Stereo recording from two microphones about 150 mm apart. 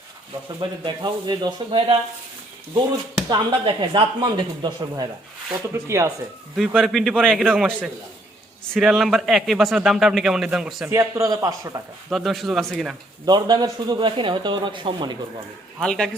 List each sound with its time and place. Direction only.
0.6 s speech: 30° right (ahead or behind)
3.2 s speech: 30° right (ahead or behind)
5.7 s speech: 20° right (ahead or behind)
6.7 s a man's voice: centre (ahead or behind)
8.7 s a man's voice: centre (ahead or behind)
10.8 s speech: 20° right (ahead or behind)
12.1 s a man's voice: centre (ahead or behind)
13.2 s speech: 30° right (ahead or behind)
15.8 s a man's voice: 5° left (ahead or behind)